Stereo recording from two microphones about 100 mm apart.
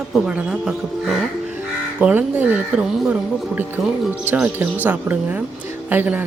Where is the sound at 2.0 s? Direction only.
15° right (ahead or behind).